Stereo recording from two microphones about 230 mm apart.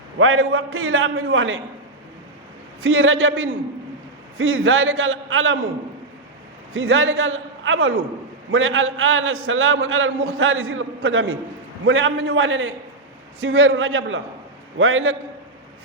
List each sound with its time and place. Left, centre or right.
0.2 s a man's voice: right
2.8 s a man's voice: right
6.7 s a man's voice: right